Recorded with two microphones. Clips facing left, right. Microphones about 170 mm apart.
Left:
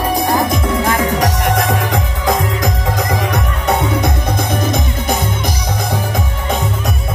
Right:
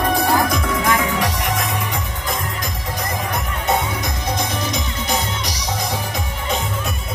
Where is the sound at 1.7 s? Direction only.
85° left; by 5.3 s 50° left (ahead or behind).